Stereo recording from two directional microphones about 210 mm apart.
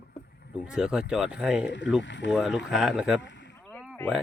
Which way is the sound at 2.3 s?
5° right (ahead or behind).